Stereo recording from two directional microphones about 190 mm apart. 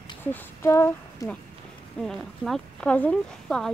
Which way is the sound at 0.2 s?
10° left (ahead or behind).